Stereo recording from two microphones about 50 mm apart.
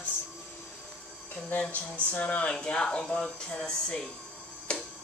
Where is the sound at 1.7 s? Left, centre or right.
Left.